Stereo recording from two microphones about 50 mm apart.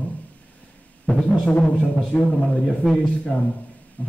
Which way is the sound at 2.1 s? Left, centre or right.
Centre.